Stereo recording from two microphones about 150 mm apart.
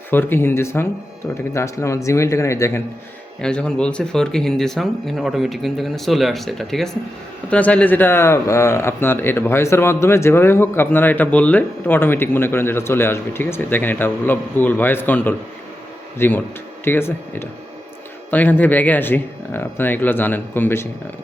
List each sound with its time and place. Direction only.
0.1 s speech: 15° left (ahead or behind)
3.4 s speech: 5° left (ahead or behind)